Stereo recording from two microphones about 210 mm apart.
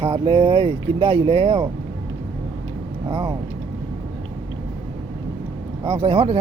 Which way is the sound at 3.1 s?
25° right (ahead or behind).